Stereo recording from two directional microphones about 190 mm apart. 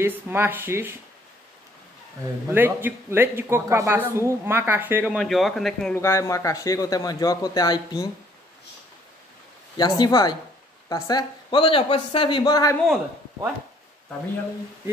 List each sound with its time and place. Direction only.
0.0 s speech: 10° right (ahead or behind)
2.5 s speech: 10° right (ahead or behind)
5.1 s speech: centre (ahead or behind)
5.9 s a man's voice: 15° left (ahead or behind)
9.8 s a man's voice: 20° left (ahead or behind)